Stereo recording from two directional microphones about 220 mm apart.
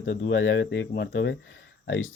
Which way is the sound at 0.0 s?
50° left (ahead or behind).